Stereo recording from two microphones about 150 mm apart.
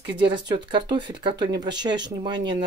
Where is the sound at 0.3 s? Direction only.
30° right (ahead or behind).